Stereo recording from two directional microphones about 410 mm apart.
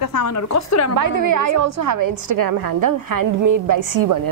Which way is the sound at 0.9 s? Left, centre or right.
Right.